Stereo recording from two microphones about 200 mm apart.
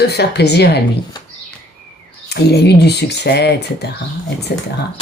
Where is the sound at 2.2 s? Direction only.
55° left (ahead or behind).